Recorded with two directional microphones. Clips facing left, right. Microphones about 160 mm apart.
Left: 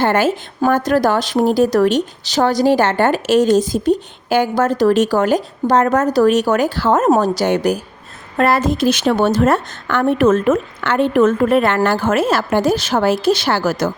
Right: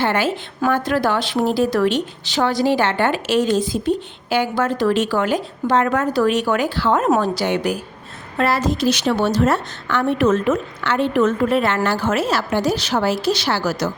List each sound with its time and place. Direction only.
0.0 s a woman's voice: 45° left (ahead or behind)